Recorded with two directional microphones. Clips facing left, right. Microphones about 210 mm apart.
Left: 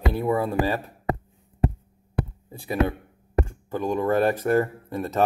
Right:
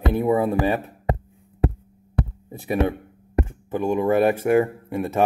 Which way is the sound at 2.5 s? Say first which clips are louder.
Right 2 dB; 20° right (ahead or behind).